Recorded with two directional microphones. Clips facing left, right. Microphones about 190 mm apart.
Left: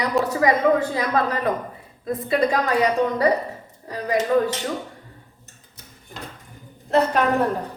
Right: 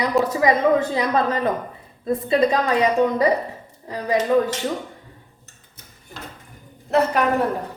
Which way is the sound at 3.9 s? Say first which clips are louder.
Right 1 dB; 20° right (ahead or behind).